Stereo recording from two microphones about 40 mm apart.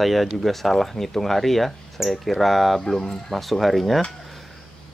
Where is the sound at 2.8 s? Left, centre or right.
Centre.